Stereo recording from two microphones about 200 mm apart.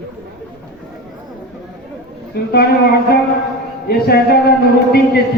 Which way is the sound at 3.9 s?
50° left (ahead or behind).